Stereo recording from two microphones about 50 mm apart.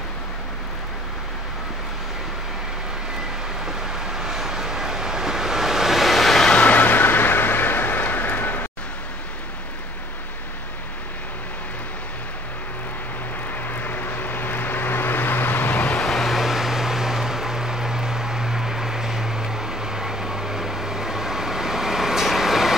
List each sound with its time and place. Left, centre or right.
3.6 s vehicle: centre
6.5 s a sound: left
13.5 s vehicle: left
16.0 s vehicle: centre